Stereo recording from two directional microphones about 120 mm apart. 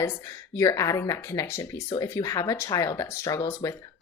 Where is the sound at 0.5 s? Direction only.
25° left (ahead or behind).